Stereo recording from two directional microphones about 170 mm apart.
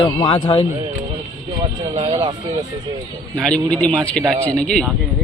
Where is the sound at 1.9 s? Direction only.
35° right (ahead or behind).